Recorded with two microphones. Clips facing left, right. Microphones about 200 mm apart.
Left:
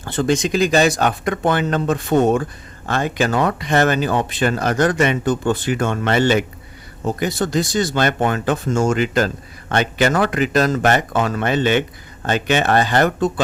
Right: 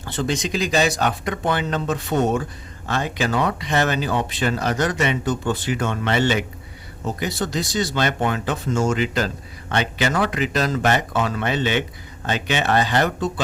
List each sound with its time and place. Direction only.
0.0 s speech: 50° left (ahead or behind)